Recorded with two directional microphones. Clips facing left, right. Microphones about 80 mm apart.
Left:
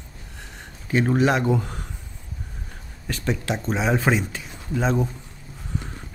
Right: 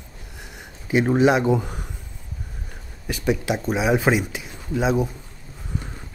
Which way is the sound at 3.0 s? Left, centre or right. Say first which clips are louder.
Right 4 dB; centre.